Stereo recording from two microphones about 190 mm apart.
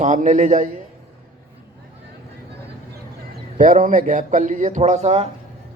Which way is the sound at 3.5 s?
45° right (ahead or behind).